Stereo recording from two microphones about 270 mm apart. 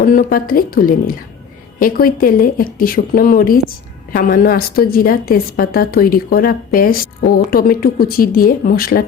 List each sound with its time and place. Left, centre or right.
0.0 s a woman's voice: left